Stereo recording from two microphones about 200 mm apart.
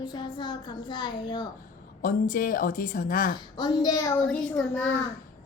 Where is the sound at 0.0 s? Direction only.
20° left (ahead or behind).